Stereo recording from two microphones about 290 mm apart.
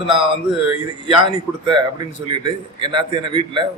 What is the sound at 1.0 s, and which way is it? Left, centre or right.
A man's voice, centre.